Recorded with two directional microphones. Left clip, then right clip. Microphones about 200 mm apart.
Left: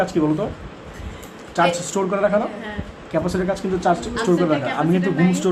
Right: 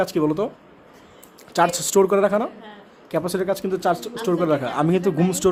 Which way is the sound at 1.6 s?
55° right (ahead or behind).